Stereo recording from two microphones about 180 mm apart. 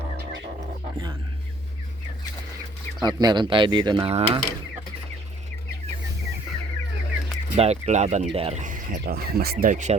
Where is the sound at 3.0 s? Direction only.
25° right (ahead or behind).